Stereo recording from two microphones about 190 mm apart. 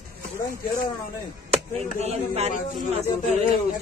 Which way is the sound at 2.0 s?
35° right (ahead or behind).